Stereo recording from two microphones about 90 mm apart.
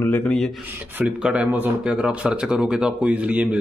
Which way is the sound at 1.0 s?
10° right (ahead or behind).